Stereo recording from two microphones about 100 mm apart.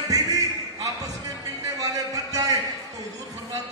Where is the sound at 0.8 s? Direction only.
35° right (ahead or behind).